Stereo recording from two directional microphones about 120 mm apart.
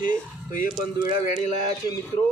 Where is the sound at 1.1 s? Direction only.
80° left.